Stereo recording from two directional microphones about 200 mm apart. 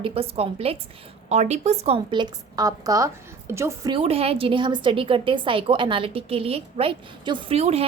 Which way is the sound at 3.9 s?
30° right (ahead or behind).